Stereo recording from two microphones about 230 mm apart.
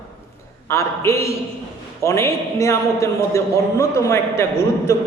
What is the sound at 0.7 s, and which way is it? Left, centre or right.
A man's voice, centre.